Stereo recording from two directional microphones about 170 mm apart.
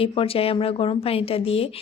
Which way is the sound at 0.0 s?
30° left (ahead or behind).